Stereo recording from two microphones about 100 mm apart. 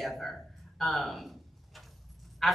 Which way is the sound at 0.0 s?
Centre (ahead or behind).